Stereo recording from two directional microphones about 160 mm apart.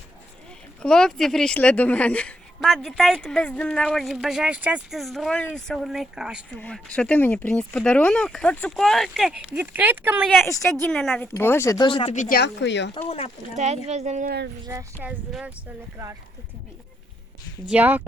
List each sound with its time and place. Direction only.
0.8 s speech: 5° left (ahead or behind)
6.6 s speech: 5° left (ahead or behind); by 10.2 s 10° right (ahead or behind)
10.4 s speech: 20° left (ahead or behind)
10.8 s speech: centre (ahead or behind)
11.2 s speech: 15° left (ahead or behind)
11.9 s speech: 35° left (ahead or behind)
12.1 s a woman's voice: 55° left (ahead or behind)
12.4 s speech: 90° left
13.0 s speech: 40° left (ahead or behind)
13.8 s speech: 45° right (ahead or behind)
14.3 s speech: 90° right
14.7 s speech: 20° right (ahead or behind)
15.3 s speech: 5° right (ahead or behind)
17.7 s speech: 10° right (ahead or behind)